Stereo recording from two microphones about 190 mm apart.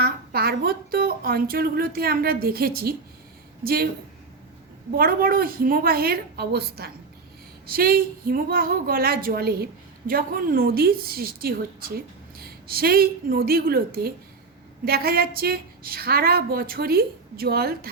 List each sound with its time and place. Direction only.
0.0 s a woman's voice: 55° right (ahead or behind)
4.9 s a woman's voice: 50° right (ahead or behind)